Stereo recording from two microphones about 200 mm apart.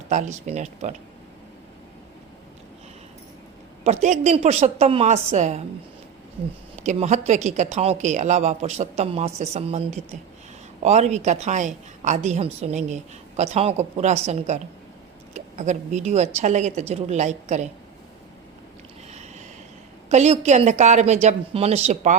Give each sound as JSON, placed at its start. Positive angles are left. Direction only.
{"t": 0.1, "sound": "a woman's voice", "side_deg": -35}
{"t": 3.8, "sound": "a woman's voice", "side_deg": -35}
{"t": 6.7, "sound": "a woman's voice", "side_deg": -35}
{"t": 19.1, "sound": "a sound", "side_deg": -35}
{"t": 20.1, "sound": "a woman's voice", "side_deg": -35}